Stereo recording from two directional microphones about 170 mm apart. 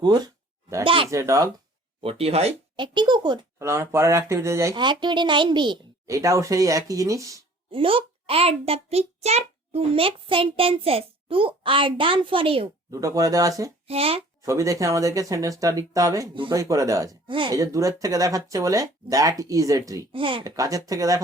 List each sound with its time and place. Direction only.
1.1 s speech: 20° right (ahead or behind)
2.0 s a child's voice: 35° right (ahead or behind)
3.6 s speech: 15° right (ahead or behind)
7.7 s a child's voice: 30° right (ahead or behind)
12.9 s speech: 20° right (ahead or behind)
13.8 s a child's voice: 35° right (ahead or behind)
14.4 s speech: 20° right (ahead or behind)
20.1 s a child's voice: 30° right (ahead or behind)
20.4 s speech: 20° right (ahead or behind)